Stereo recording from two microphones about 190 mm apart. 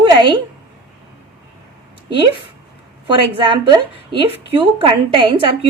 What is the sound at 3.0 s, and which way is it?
Speech, 25° right (ahead or behind).